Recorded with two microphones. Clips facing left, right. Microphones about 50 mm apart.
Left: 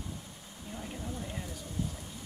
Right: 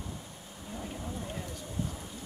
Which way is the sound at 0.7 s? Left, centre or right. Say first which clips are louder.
Right 2 dB; centre.